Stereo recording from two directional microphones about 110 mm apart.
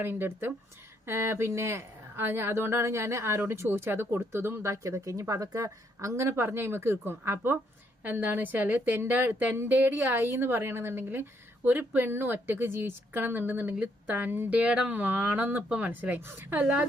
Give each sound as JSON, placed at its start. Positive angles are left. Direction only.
{"t": 0.0, "sound": "a woman's voice", "side_deg": -20}